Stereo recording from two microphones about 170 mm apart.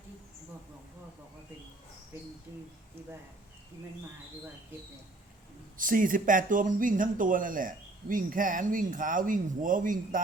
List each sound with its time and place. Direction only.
5.7 s speech: 55° right (ahead or behind)